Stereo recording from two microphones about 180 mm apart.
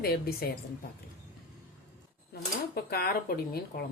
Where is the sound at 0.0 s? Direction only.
60° left (ahead or behind).